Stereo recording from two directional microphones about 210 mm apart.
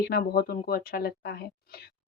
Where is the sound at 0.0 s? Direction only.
50° left (ahead or behind).